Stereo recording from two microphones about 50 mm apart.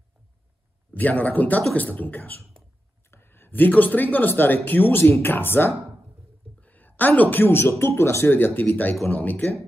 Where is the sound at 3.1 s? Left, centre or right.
Left.